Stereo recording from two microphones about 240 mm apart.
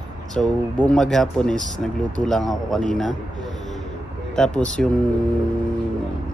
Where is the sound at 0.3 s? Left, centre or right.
Centre.